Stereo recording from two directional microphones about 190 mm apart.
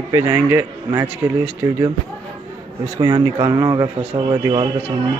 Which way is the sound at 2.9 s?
20° right (ahead or behind).